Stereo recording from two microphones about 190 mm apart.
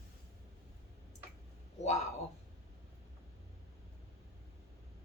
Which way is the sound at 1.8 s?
35° left (ahead or behind).